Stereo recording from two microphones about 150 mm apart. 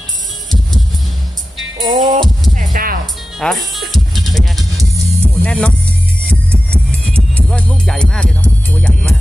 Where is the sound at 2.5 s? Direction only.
70° right (ahead or behind).